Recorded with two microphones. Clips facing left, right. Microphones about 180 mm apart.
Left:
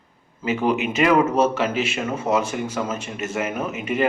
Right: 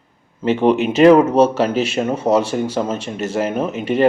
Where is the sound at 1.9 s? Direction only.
35° right (ahead or behind).